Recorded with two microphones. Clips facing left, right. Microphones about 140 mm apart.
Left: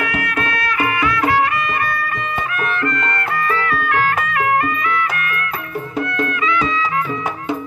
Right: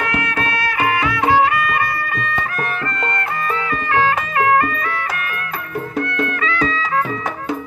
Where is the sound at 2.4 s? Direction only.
35° right (ahead or behind).